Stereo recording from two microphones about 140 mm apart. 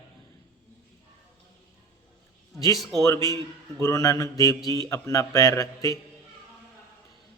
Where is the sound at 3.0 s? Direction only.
20° left (ahead or behind).